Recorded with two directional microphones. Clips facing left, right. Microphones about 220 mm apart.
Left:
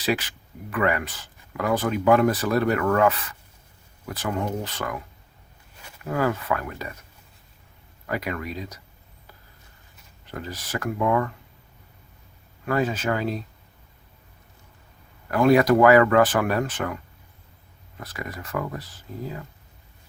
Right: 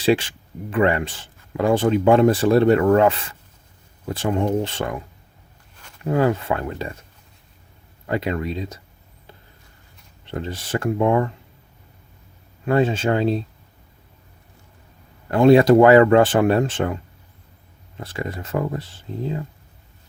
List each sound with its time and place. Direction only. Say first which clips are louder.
0.0 s speech: right 7 dB; 30° right (ahead or behind)
6.1 s speech: right 5 dB; 25° right (ahead or behind)
8.0 s speech: right 6 dB; 25° right (ahead or behind)
10.2 s speech: right 6 dB; 25° right (ahead or behind)
12.6 s speech: right 5 dB; 25° right (ahead or behind)
15.3 s speech: right 5 dB; 25° right (ahead or behind)